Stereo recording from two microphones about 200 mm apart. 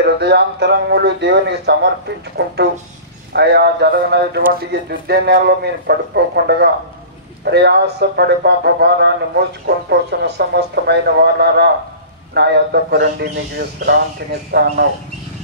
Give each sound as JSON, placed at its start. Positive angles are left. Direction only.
{"t": 0.0, "sound": "speech", "side_deg": -55}